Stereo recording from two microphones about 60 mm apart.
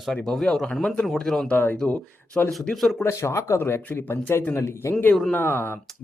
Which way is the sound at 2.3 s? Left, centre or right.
Left.